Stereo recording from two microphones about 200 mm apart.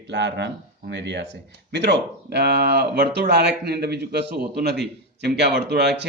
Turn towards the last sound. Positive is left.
turn(degrees=-55)  # may be behind; listen again after turning